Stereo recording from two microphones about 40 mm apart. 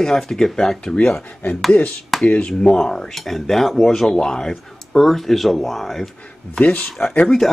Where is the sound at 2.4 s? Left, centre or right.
Centre.